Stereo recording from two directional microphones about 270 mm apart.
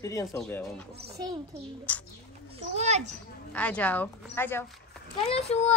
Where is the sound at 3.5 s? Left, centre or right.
Centre.